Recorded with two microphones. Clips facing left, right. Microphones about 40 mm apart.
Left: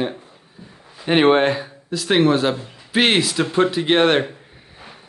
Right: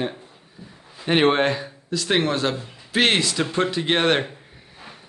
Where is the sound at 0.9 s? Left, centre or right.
Centre.